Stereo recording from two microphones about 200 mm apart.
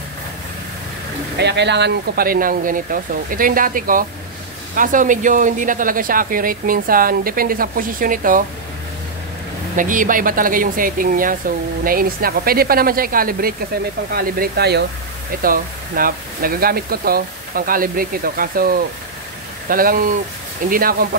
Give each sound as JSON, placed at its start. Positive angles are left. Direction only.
{"t": 1.4, "sound": "speech", "side_deg": -60}
{"t": 9.8, "sound": "speech", "side_deg": -40}